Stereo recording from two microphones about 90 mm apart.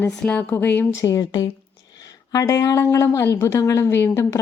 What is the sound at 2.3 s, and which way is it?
A woman's voice, 40° left (ahead or behind).